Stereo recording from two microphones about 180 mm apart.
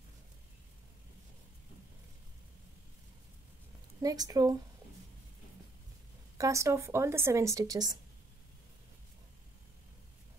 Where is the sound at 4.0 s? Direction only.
20° right (ahead or behind).